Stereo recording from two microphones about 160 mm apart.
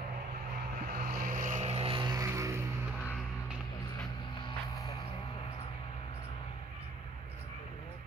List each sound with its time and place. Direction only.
0.9 s vehicle: 60° right (ahead or behind); by 2.6 s 20° right (ahead or behind)